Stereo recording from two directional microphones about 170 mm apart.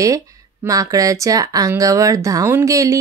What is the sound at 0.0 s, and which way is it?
Speech, 20° right (ahead or behind).